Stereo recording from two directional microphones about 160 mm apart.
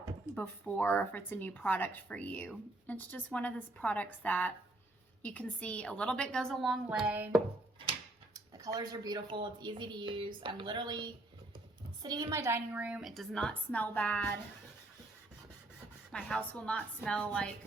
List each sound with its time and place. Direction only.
0.3 s a woman's voice: 10° left (ahead or behind); by 7.4 s 10° right (ahead or behind)
8.3 s a woman's voice: 20° right (ahead or behind); by 14.3 s 10° left (ahead or behind)
16.1 s a woman's voice: 5° left (ahead or behind)